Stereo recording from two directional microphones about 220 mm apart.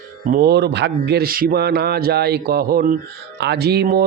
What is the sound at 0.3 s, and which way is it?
Speech, 45° right (ahead or behind).